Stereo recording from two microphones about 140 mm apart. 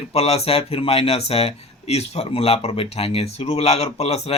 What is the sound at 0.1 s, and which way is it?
Speech, 45° left (ahead or behind).